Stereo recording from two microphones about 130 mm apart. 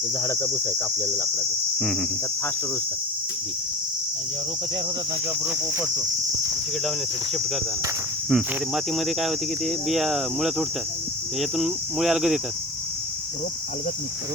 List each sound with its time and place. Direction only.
0.2 s cricket: 20° left (ahead or behind)
1.8 s speech: centre (ahead or behind)
8.3 s speech: 5° right (ahead or behind)